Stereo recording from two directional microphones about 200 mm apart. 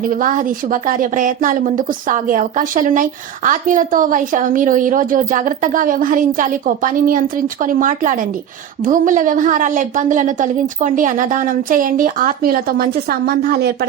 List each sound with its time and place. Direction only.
0.1 s a woman's voice: 40° right (ahead or behind)